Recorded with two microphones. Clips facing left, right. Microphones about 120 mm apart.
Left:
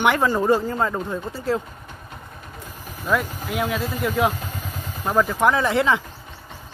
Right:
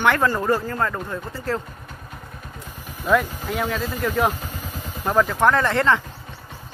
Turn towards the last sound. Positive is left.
turn(degrees=10)  # may be behind; listen again after turning